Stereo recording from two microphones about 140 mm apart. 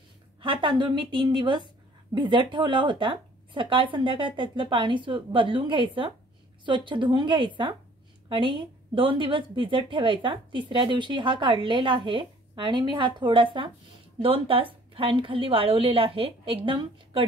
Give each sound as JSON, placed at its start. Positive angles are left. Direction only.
{"t": 0.4, "sound": "a woman's voice", "side_deg": -35}